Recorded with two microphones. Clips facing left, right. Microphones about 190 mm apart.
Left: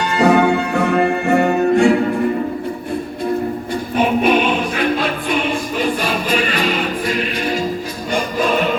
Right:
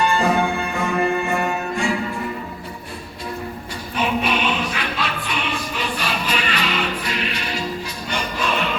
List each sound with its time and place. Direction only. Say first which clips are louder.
0.0 s music: left 5 dB; 75° left (ahead or behind); by 2.1 s 60° left (ahead or behind)
3.9 s music: left 7 dB; 50° left (ahead or behind)